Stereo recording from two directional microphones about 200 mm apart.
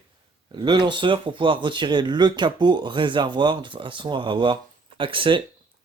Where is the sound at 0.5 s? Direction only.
20° right (ahead or behind).